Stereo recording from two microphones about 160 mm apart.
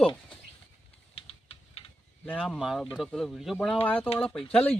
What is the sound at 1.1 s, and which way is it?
Typing, 35° left (ahead or behind).